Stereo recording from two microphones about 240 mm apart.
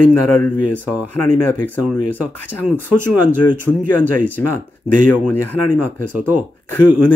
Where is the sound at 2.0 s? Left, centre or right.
Left.